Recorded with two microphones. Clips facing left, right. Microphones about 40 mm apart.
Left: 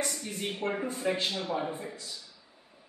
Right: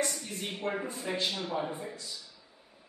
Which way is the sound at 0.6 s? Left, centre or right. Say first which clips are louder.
Even; left.